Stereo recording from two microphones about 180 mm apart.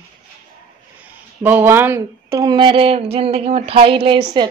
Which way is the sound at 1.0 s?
10° right (ahead or behind).